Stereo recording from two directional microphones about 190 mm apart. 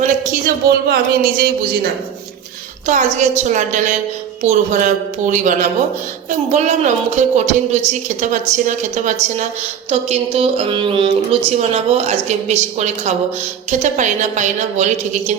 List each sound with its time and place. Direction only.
0.0 s speech: 45° right (ahead or behind)
2.8 s a woman's voice: 40° right (ahead or behind)